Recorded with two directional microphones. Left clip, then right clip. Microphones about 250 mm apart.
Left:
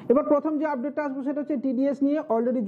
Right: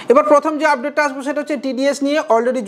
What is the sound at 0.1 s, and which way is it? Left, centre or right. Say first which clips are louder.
Speech: right 10 dB; centre.